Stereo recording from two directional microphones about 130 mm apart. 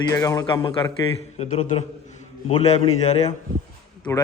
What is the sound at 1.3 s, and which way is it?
A man's voice, 55° left (ahead or behind).